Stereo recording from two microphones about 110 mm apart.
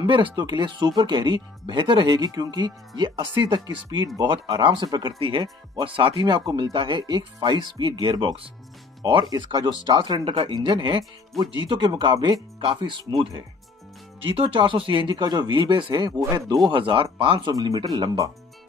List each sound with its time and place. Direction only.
0.0 s speech: 45° right (ahead or behind)
6.1 s speech: 35° right (ahead or behind)
14.2 s speech: 55° right (ahead or behind); by 16.5 s 30° right (ahead or behind)
16.6 s speech: 50° right (ahead or behind)
17.5 s speech: 35° right (ahead or behind)